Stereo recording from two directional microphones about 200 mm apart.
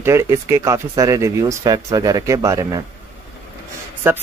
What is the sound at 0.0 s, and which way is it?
Speech, 15° right (ahead or behind).